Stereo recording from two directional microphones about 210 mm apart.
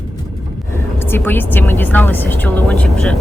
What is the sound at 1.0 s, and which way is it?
Speech, 10° left (ahead or behind).